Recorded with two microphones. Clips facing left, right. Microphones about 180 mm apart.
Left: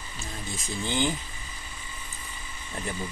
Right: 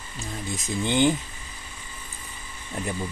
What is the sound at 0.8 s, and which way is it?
Speech, 20° right (ahead or behind).